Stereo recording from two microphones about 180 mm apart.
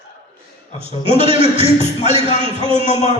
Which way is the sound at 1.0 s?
30° right (ahead or behind).